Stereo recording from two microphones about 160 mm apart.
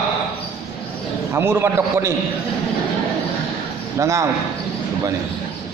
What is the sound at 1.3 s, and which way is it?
Speech, 15° right (ahead or behind).